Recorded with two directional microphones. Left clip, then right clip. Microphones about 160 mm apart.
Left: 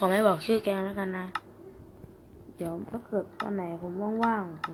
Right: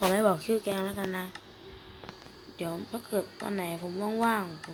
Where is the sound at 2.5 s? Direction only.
15° right (ahead or behind).